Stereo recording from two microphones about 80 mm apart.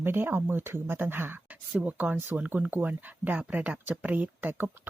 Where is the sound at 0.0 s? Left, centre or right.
Right.